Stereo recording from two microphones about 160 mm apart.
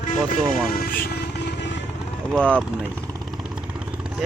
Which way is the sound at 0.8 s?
65° left (ahead or behind).